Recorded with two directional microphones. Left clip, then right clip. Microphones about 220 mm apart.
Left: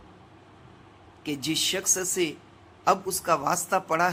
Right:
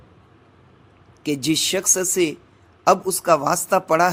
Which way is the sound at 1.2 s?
30° right (ahead or behind).